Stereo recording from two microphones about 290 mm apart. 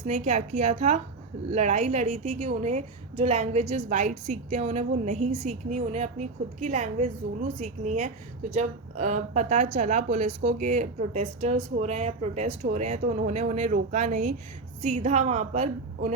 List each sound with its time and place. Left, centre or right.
0.0 s a woman's voice: right